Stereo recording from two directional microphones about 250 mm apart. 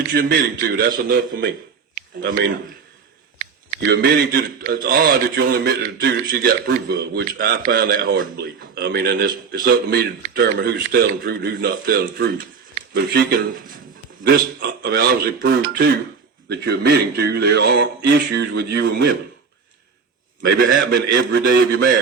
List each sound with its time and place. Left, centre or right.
0.1 s speech: right
3.8 s speech: right
20.8 s a man's voice: right